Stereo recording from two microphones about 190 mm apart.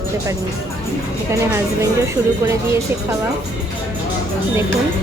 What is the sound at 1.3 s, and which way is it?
Speech, 15° right (ahead or behind).